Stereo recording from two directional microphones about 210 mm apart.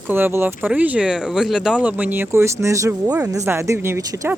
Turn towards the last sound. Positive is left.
turn(degrees=-15)  # may be behind; listen again after turning